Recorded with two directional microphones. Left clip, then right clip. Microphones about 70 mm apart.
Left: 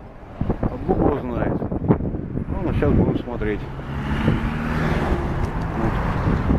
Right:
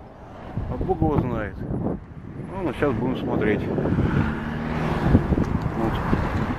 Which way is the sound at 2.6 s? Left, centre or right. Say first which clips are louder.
Left 2 dB; right.